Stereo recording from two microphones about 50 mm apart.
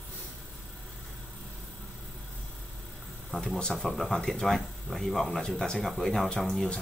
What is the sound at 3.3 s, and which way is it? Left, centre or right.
Speech, centre.